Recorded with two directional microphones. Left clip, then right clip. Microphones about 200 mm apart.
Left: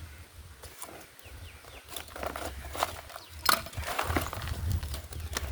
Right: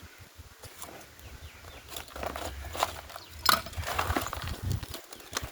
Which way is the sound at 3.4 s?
15° left (ahead or behind).